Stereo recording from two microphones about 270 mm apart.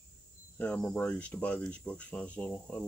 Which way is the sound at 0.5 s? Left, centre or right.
Centre.